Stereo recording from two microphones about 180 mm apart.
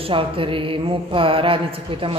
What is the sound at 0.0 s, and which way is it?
Speech, 30° right (ahead or behind).